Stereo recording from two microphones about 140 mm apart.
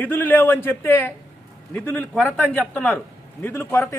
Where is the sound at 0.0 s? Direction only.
15° left (ahead or behind).